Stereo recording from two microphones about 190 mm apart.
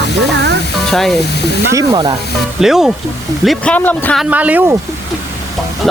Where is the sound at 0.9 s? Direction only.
Centre (ahead or behind).